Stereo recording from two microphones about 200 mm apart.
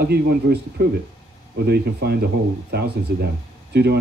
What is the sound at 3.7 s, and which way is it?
Speech, 55° right (ahead or behind).